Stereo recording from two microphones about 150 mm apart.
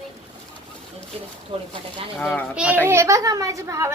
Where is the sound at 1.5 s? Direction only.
40° right (ahead or behind).